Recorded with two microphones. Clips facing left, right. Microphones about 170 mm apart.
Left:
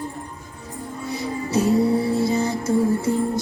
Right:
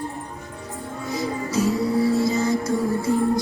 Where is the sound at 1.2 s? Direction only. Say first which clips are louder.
Left 1 dB; 60° left (ahead or behind).